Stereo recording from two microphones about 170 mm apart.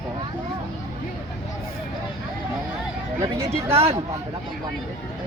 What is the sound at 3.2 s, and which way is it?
Speech, 15° right (ahead or behind).